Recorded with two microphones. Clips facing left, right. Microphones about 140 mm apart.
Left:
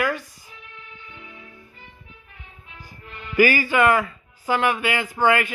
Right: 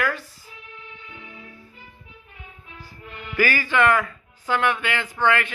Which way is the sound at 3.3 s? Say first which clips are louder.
Left 3 dB; 10° left (ahead or behind).